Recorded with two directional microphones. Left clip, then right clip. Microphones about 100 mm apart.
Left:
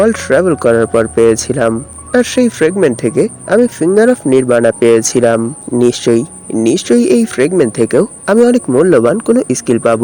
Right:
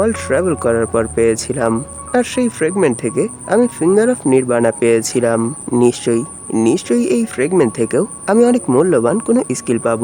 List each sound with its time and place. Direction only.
0.0 s speech: 25° left (ahead or behind)